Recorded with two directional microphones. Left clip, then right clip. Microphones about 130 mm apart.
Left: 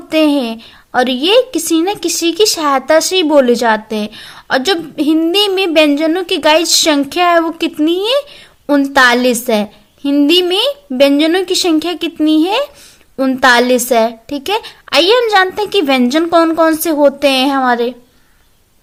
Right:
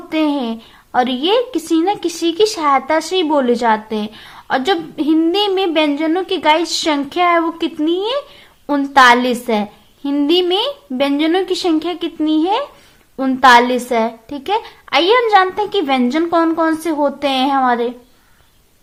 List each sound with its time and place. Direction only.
0.1 s a woman's voice: 30° left (ahead or behind)